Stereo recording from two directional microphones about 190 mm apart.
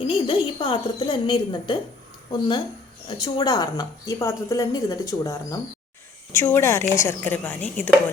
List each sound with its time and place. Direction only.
0.0 s a woman's voice: 30° left (ahead or behind); by 7.9 s 10° left (ahead or behind)